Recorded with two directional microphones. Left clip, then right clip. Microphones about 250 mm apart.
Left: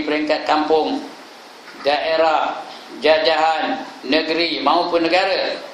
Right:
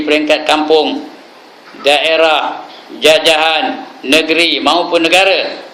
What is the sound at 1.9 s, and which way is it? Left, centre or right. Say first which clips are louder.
Speech: right 7 dB; right.